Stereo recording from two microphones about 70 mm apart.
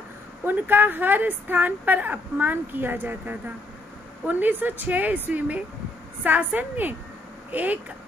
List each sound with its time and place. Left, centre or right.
0.5 s a woman's voice: right